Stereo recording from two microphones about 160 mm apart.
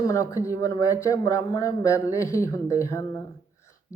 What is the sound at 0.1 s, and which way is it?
Speech, 20° left (ahead or behind).